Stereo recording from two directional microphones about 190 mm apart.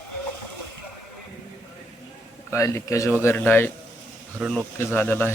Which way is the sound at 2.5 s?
15° left (ahead or behind).